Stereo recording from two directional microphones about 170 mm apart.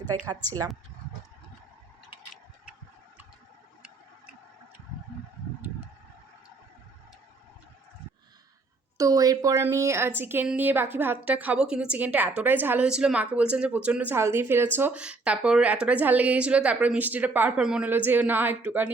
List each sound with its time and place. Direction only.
9.0 s a woman's voice: 20° right (ahead or behind)